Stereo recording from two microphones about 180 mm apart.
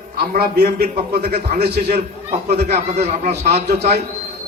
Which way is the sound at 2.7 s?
35° right (ahead or behind).